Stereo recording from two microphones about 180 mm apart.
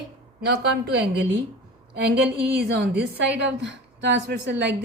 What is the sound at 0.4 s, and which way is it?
Speech, 65° right (ahead or behind).